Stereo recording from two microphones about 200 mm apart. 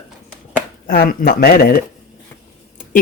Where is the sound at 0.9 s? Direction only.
50° left (ahead or behind).